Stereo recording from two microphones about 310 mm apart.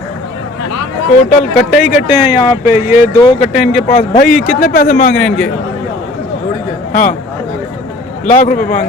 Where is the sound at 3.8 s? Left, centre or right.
Left.